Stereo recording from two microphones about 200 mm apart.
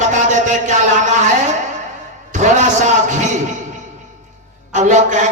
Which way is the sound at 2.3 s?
35° right (ahead or behind).